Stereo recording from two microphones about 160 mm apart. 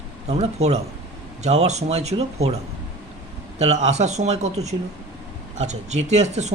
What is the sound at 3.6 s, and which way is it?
Speech, 45° right (ahead or behind).